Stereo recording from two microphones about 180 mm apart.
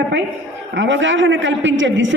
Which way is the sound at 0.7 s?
90° right.